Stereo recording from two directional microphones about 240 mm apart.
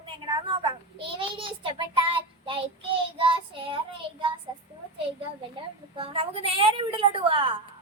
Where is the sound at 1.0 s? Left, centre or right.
Right.